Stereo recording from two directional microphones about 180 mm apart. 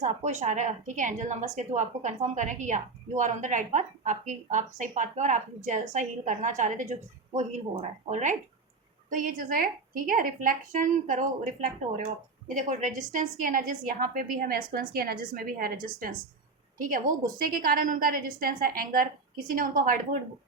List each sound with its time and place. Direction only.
0.0 s a woman's voice: 40° right (ahead or behind)